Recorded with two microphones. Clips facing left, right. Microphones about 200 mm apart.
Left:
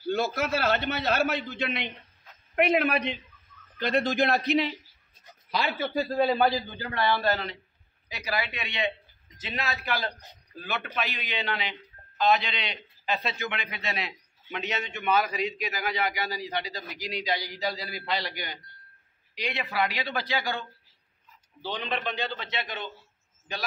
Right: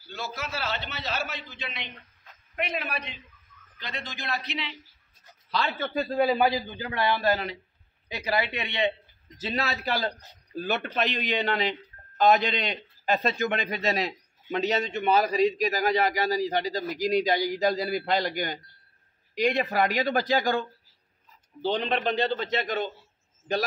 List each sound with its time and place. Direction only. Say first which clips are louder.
0.0 s a man's voice: left 9 dB; 55° left (ahead or behind)
5.2 s speech: even; 10° left (ahead or behind)
6.1 s a man's voice: right 1 dB; 5° right (ahead or behind)
6.5 s a man's voice: right 1 dB; 15° right (ahead or behind)
8.1 s a man's voice: right 4 dB; 25° right (ahead or behind)
9.4 s a man's voice: right 4 dB; 35° right (ahead or behind)
21.7 s a man's voice: right 4 dB; 40° right (ahead or behind)